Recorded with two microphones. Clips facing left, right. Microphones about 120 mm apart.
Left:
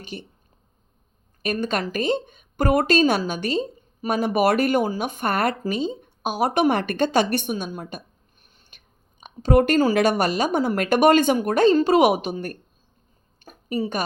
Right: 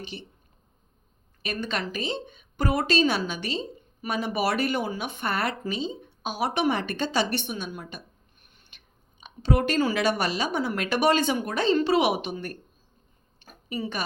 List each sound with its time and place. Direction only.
0.0 s speech: 45° left (ahead or behind)
1.4 s speech: 45° left (ahead or behind)
13.4 s a sound: 45° left (ahead or behind)